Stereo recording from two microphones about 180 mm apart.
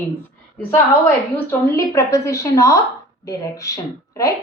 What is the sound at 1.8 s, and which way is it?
A woman's voice, 15° left (ahead or behind).